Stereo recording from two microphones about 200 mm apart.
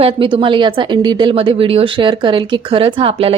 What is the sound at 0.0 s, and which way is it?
A woman's voice, 25° right (ahead or behind).